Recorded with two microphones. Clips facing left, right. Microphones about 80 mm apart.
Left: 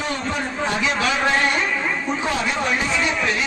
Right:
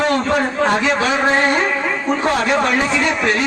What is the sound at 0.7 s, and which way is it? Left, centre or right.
A man's voice, right.